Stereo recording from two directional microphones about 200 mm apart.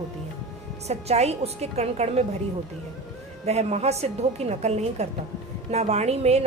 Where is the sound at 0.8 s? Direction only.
35° right (ahead or behind).